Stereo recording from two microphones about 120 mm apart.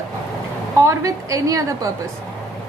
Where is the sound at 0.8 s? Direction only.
25° right (ahead or behind).